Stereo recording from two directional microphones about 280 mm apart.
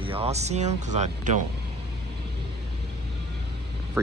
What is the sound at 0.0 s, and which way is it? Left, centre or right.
Speech, centre.